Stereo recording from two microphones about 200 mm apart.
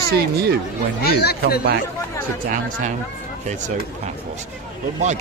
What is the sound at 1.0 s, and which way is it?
Speech, 50° left (ahead or behind).